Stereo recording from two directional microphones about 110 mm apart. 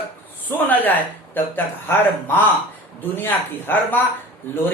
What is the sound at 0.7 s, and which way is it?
A man's voice, 15° left (ahead or behind).